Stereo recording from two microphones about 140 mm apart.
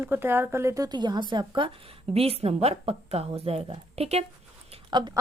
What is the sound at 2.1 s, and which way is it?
A woman's voice, 45° right (ahead or behind).